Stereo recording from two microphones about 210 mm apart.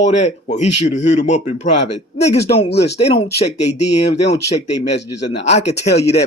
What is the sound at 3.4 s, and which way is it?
Speech, 30° left (ahead or behind).